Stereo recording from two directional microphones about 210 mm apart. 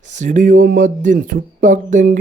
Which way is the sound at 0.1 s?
35° right (ahead or behind).